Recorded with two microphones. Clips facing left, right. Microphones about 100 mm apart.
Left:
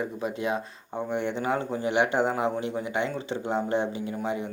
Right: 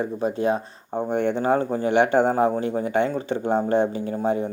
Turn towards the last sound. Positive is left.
turn(degrees=-40)  # may be behind; listen again after turning